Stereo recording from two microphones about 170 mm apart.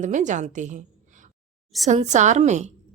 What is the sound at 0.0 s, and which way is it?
A woman's voice, 45° right (ahead or behind).